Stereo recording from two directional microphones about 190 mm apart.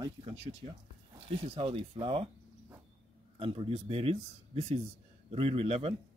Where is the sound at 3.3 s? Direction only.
30° right (ahead or behind).